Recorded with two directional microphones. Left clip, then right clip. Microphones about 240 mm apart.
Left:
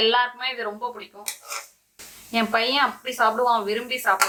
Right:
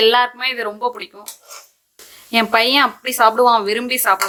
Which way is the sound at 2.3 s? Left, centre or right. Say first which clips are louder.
Right 7 dB; right.